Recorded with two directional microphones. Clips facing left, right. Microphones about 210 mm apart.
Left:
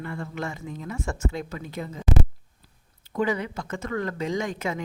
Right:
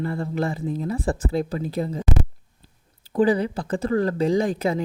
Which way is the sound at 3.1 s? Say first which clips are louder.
Right 7 dB; 35° right (ahead or behind).